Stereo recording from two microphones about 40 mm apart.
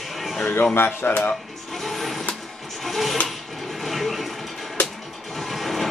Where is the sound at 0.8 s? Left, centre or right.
Left.